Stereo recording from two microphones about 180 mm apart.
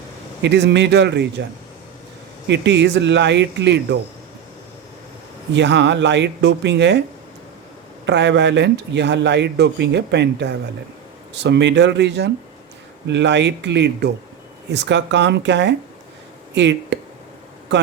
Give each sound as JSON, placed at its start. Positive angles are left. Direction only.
{"t": 0.4, "sound": "speech", "side_deg": -75}
{"t": 2.5, "sound": "speech", "side_deg": -75}
{"t": 5.5, "sound": "speech", "side_deg": -75}
{"t": 8.0, "sound": "speech", "side_deg": -75}